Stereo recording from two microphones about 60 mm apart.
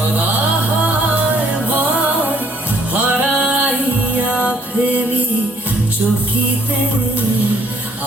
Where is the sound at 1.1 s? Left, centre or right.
Right.